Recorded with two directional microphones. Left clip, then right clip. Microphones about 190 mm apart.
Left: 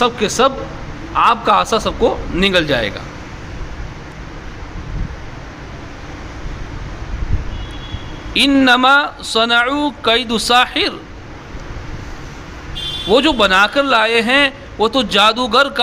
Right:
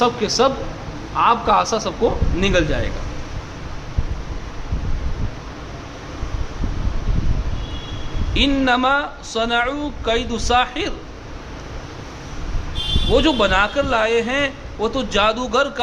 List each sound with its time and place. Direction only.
0.0 s a man's voice: 15° left (ahead or behind)
8.3 s a man's voice: 30° left (ahead or behind)
13.1 s a man's voice: 30° left (ahead or behind)